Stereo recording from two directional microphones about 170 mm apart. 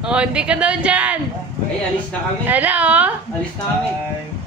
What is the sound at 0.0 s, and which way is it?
Speech, 5° right (ahead or behind).